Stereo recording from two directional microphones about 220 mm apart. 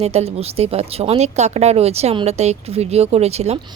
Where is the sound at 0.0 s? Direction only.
30° right (ahead or behind).